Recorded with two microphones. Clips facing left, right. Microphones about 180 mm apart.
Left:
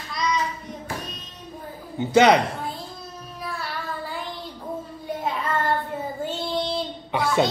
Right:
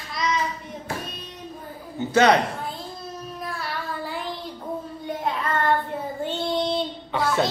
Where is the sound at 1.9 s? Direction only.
15° left (ahead or behind).